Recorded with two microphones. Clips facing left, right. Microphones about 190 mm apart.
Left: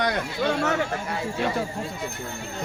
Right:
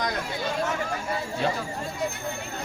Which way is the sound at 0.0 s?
70° left (ahead or behind).